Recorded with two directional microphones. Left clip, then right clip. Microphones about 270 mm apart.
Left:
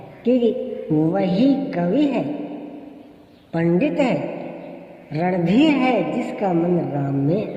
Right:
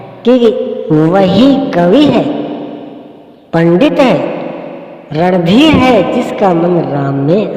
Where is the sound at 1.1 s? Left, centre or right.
Right.